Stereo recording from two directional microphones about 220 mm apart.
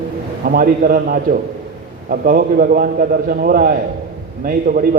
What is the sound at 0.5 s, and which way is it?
A man's voice, 40° right (ahead or behind).